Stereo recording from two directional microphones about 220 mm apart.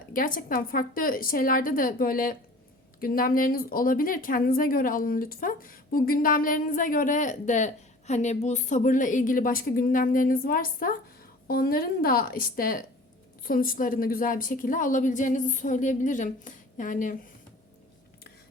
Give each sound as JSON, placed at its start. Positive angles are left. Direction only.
{"t": 0.1, "sound": "a woman's voice", "side_deg": 40}